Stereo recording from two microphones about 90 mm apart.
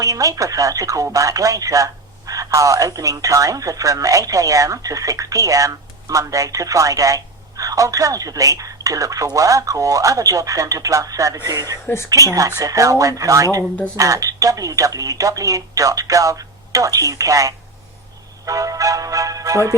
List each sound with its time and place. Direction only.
0.0 s speech: 40° right (ahead or behind)